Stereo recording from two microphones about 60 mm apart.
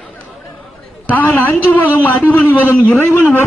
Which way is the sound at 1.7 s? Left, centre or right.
Left.